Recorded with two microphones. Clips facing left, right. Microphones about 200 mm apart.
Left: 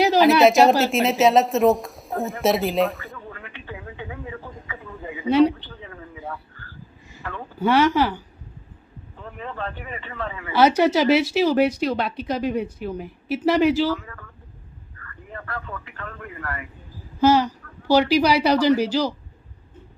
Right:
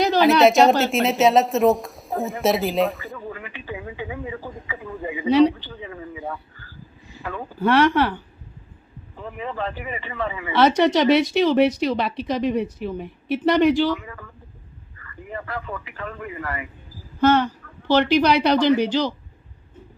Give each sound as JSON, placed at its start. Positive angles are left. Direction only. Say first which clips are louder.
{"t": 0.0, "sound": "a sound", "louder": "even", "side_deg": 5}
{"t": 7.2, "sound": "speech", "louder": "right 3 dB", "side_deg": -15}
{"t": 7.6, "sound": "a woman's voice", "louder": "right 1 dB", "side_deg": 0}
{"t": 9.4, "sound": "a woman's voice", "louder": "right 3 dB", "side_deg": -5}
{"t": 14.0, "sound": "a sound", "louder": "right 3 dB", "side_deg": -10}
{"t": 15.9, "sound": "speech", "louder": "right 4 dB", "side_deg": -10}